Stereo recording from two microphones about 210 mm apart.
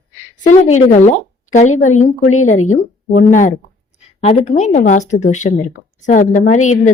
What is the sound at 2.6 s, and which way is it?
A woman's voice, 35° left (ahead or behind).